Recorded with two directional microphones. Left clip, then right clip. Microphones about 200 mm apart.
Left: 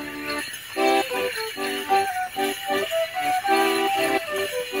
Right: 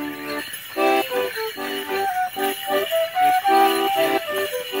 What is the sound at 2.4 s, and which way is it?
Music, 35° left (ahead or behind).